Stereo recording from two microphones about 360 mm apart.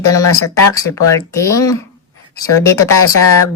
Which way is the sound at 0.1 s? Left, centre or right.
Centre.